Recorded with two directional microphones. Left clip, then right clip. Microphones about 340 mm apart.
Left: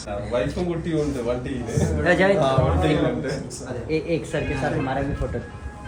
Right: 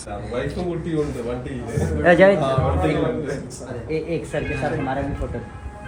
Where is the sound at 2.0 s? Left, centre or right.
Centre.